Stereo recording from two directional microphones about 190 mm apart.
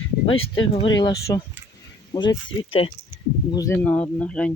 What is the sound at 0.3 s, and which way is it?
Speech, 30° left (ahead or behind).